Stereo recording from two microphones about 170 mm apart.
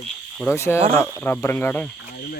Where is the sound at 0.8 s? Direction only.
35° right (ahead or behind).